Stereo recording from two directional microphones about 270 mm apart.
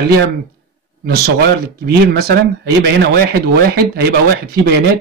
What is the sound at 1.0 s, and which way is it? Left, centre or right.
Speech, right.